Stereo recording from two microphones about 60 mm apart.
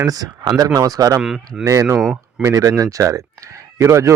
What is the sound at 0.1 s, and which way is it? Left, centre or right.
Speech, right.